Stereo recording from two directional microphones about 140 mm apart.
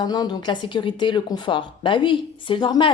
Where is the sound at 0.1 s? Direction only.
30° left (ahead or behind).